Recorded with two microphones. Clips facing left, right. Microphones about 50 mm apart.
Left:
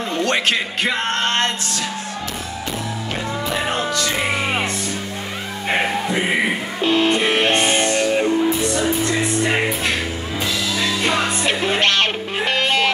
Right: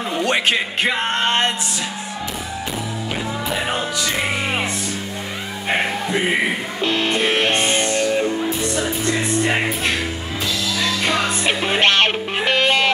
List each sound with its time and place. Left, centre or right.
0.1 s speech: centre
3.4 s music: centre
6.8 s music: centre
11.4 s music: centre
12.4 s music: right